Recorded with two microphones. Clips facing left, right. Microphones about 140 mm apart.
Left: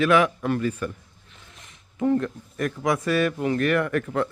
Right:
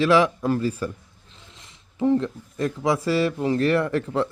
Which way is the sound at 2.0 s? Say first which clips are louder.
Right 2 dB; 20° right (ahead or behind).